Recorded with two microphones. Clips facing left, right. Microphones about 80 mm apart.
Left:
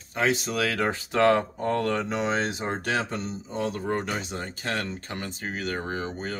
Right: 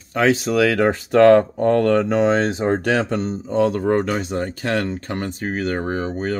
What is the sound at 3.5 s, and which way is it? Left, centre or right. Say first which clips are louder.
Speech: right 12 dB; right.